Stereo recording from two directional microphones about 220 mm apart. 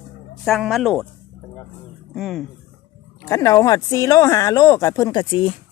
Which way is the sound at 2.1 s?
Centre (ahead or behind).